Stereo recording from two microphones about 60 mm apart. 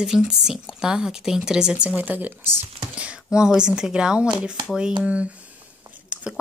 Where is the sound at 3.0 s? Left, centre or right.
Centre.